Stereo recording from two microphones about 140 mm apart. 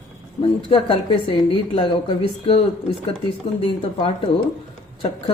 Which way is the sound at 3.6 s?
40° left (ahead or behind).